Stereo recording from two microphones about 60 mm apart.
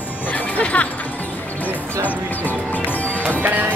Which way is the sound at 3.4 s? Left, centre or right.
Right.